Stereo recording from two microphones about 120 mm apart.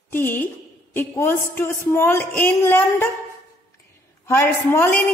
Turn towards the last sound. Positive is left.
turn(degrees=20)  # may be behind; listen again after turning